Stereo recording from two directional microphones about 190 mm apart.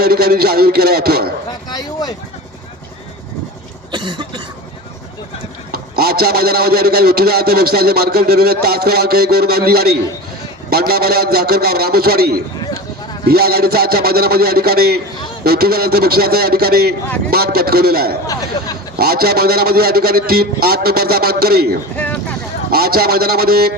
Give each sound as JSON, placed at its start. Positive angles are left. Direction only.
{"t": 0.0, "sound": "a man's voice", "side_deg": -55}
{"t": 1.7, "sound": "speech", "side_deg": 20}
{"t": 3.9, "sound": "cough", "side_deg": -25}
{"t": 5.7, "sound": "a man's voice", "side_deg": -55}
{"t": 21.9, "sound": "a sound", "side_deg": 10}
{"t": 22.7, "sound": "a man's voice", "side_deg": -55}